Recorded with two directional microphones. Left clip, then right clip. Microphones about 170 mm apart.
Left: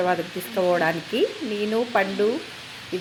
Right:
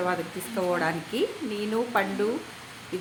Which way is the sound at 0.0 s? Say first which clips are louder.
Left 5 dB; 20° left (ahead or behind).